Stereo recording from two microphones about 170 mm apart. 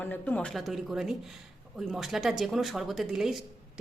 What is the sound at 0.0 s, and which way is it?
Speech, 10° left (ahead or behind).